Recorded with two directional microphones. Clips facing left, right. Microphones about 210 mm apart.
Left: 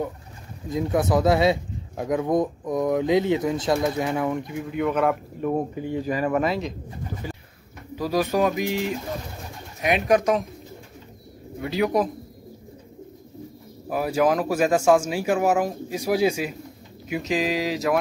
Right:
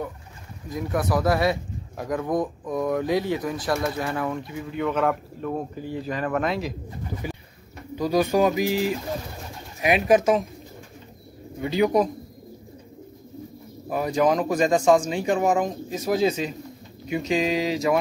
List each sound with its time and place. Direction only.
0.7 s speech: 25° left (ahead or behind)
4.6 s speech: 5° left (ahead or behind)
7.2 s bird: 15° right (ahead or behind)
7.9 s speech: centre (ahead or behind)
11.6 s speech: centre (ahead or behind)
13.8 s speech: 5° left (ahead or behind)